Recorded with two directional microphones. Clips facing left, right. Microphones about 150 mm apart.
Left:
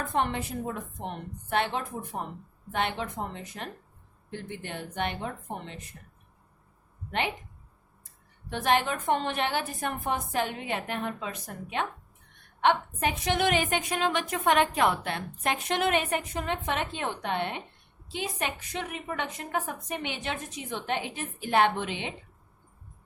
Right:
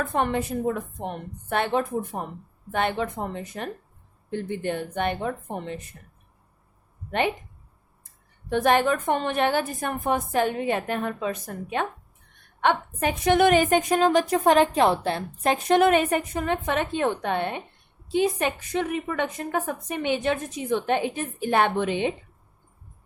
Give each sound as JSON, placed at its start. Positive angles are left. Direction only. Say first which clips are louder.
{"t": 0.2, "sound": "a woman's voice", "louder": "right 4 dB", "side_deg": -50}
{"t": 8.5, "sound": "a woman's voice", "louder": "right 6 dB", "side_deg": -50}
{"t": 12.6, "sound": "a woman's voice", "louder": "right 2 dB", "side_deg": -45}